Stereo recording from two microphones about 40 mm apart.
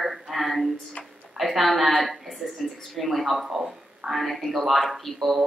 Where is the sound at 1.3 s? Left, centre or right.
Centre.